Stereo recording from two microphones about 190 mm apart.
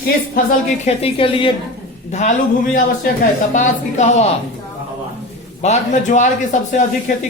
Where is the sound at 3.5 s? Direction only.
40° left (ahead or behind).